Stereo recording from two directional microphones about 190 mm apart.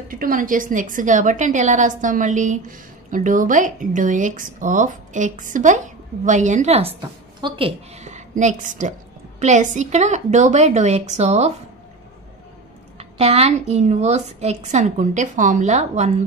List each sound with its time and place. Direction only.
0.1 s a woman's voice: 45° right (ahead or behind)
12.9 s a woman's voice: 30° right (ahead or behind)